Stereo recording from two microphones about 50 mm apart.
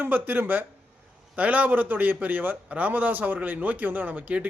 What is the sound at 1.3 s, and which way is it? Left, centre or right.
A man's voice, right.